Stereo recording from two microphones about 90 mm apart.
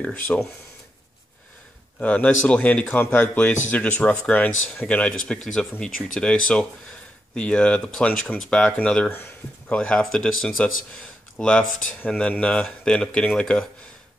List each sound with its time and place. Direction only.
0.0 s a man's voice: 15° left (ahead or behind)
2.0 s a man's voice: 15° left (ahead or behind)